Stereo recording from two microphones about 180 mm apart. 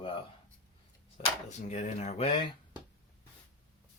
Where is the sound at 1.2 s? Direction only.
40° left (ahead or behind).